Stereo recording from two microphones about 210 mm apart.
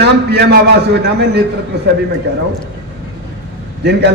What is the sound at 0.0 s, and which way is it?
A man's voice, 50° right (ahead or behind).